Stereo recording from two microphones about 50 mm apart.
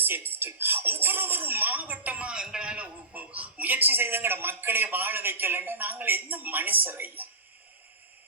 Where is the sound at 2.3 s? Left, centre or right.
Centre; by 7.2 s right.